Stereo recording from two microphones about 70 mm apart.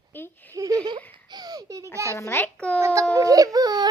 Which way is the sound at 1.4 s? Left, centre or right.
Right.